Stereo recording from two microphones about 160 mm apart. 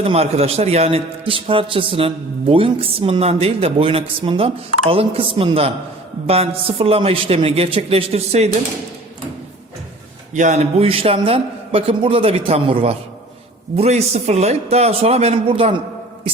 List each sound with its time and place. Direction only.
0.0 s a man's voice: 40° right (ahead or behind)
10.3 s a man's voice: 50° right (ahead or behind)